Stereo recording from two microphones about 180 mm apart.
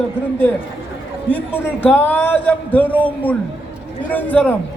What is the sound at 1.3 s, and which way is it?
A man's voice, 10° left (ahead or behind).